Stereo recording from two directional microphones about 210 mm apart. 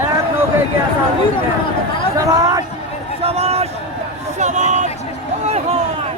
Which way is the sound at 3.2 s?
30° right (ahead or behind).